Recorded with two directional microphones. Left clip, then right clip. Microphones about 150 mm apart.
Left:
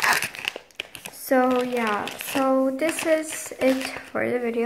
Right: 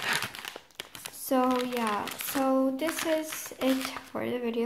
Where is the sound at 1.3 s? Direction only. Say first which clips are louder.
Left 6 dB; 10° right (ahead or behind).